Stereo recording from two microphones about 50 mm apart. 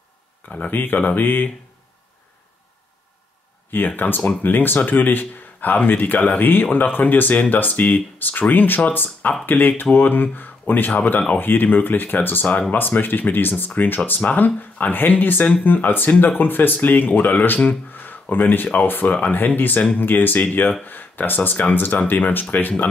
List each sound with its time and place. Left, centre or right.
0.7 s speech: left
3.7 s speech: left
11.3 s speech: left